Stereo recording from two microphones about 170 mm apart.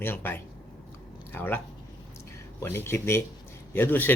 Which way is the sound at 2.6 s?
15° left (ahead or behind).